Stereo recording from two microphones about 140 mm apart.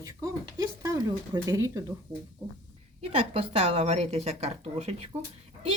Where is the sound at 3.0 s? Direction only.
45° right (ahead or behind).